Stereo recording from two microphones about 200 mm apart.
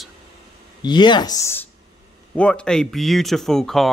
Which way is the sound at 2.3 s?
5° left (ahead or behind).